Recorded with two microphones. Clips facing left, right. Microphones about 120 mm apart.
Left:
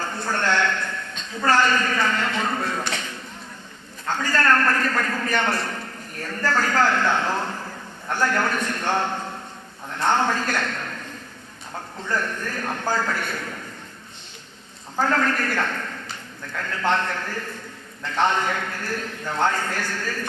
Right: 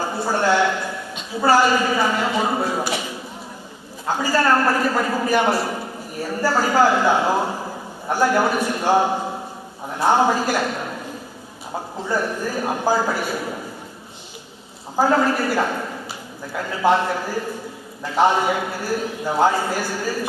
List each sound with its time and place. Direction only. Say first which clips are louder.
0.0 s a man's voice: right 5 dB; 10° right (ahead or behind)
14.9 s a man's voice: right 5 dB; 10° right (ahead or behind)